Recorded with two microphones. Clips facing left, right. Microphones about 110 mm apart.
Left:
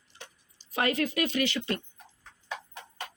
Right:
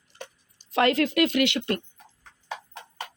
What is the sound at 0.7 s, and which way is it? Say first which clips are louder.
Speech: right 6 dB; 80° right.